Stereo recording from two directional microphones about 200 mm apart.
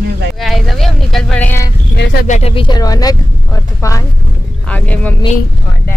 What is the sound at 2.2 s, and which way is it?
Child singing, 35° left (ahead or behind).